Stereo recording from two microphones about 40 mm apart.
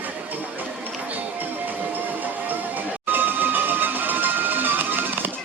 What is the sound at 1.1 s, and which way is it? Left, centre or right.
Music, right.